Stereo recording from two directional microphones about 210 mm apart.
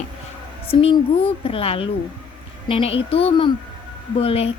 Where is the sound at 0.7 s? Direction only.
25° left (ahead or behind).